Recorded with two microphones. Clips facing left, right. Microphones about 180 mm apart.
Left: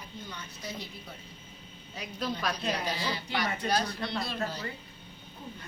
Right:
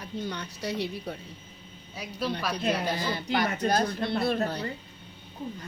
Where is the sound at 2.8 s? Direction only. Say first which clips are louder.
Right 4 dB; 50° right (ahead or behind).